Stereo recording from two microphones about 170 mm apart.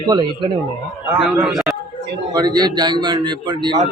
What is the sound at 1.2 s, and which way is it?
Speech, 5° right (ahead or behind).